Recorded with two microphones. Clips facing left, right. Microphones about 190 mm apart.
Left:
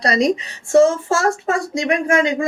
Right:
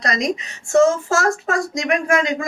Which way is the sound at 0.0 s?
30° left (ahead or behind).